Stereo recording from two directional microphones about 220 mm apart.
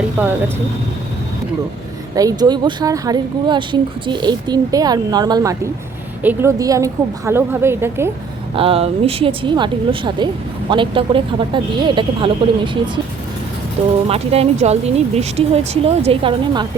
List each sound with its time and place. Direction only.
0.2 s a woman's voice: 10° right (ahead or behind)
2.1 s a woman's voice: 15° right (ahead or behind)
8.5 s speech: 25° right (ahead or behind)
13.8 s speech: 30° right (ahead or behind)